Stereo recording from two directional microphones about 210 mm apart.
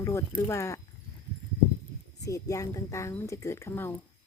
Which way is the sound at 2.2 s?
15° left (ahead or behind).